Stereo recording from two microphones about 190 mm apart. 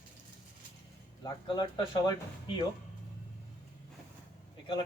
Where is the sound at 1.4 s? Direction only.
20° left (ahead or behind).